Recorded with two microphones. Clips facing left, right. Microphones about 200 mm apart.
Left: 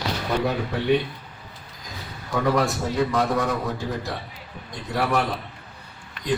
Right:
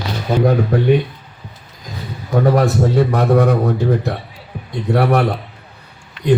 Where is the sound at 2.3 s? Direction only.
40° right (ahead or behind).